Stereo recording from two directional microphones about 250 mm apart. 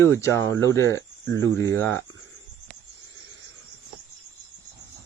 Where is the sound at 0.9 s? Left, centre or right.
Right.